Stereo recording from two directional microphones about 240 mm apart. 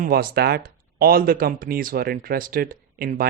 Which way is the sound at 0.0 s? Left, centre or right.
Right.